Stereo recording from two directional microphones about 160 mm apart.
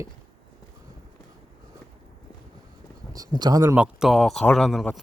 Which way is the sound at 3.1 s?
25° right (ahead or behind).